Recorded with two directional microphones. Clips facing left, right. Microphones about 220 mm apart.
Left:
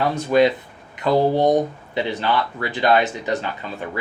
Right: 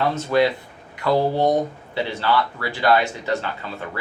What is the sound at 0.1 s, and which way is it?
Speech, 15° left (ahead or behind).